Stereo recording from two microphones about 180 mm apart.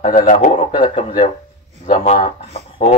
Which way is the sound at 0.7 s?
25° left (ahead or behind).